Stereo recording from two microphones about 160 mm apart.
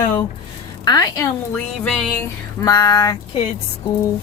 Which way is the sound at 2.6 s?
25° left (ahead or behind).